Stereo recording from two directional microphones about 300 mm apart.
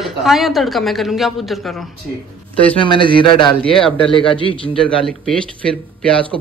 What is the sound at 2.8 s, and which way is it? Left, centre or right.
Speech, centre.